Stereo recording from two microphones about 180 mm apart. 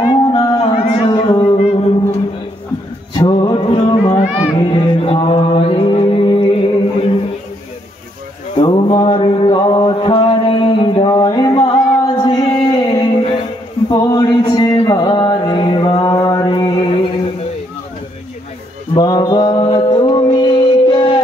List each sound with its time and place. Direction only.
0.0 s music: 25° left (ahead or behind)
3.2 s a sound: 25° left (ahead or behind)
4.4 s mantra: 25° left (ahead or behind)
8.6 s mantra: 25° left (ahead or behind)
18.9 s mantra: 20° left (ahead or behind)